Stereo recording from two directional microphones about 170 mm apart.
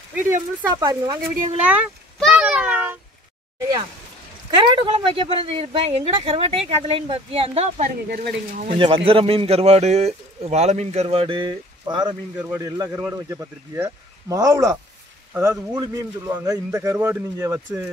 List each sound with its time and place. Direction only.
0.1 s speech: 15° right (ahead or behind)
1.6 s a man's voice: 10° right (ahead or behind)
2.1 s a sound: centre (ahead or behind)
4.7 s a man's voice: 30° right (ahead or behind)
8.1 s speech: 55° right (ahead or behind)
8.7 s a man's voice: 30° right (ahead or behind)
12.4 s a man's voice: 15° right (ahead or behind)
15.3 s a man's voice: 10° right (ahead or behind)